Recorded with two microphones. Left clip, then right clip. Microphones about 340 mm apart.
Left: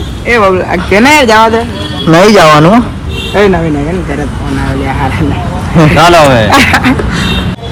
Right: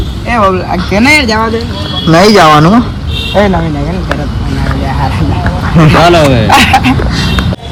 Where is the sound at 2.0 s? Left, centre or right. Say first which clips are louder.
Left 1 dB; left.